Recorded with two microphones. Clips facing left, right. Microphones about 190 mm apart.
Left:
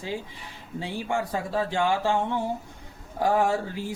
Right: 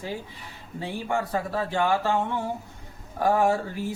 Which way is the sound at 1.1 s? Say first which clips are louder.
Even; 15° left (ahead or behind).